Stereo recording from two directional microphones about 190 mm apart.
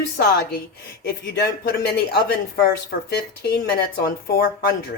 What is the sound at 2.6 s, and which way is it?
Speech, 55° left (ahead or behind).